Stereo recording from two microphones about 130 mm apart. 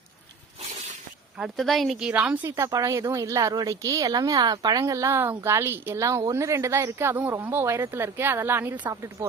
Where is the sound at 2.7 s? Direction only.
25° right (ahead or behind).